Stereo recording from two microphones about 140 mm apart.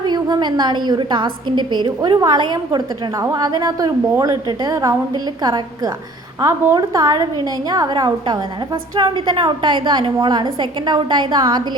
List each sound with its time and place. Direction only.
0.1 s a woman's voice: 30° right (ahead or behind)